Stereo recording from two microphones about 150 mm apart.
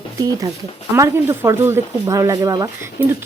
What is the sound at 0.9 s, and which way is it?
Speech, 15° right (ahead or behind).